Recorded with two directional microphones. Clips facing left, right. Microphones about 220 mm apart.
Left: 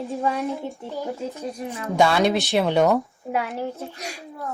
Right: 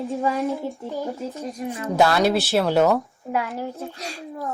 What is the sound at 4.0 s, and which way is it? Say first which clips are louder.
Speech: right 1 dB; 15° left (ahead or behind).